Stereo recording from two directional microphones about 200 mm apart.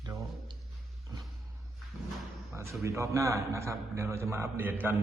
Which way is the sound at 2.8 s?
15° right (ahead or behind).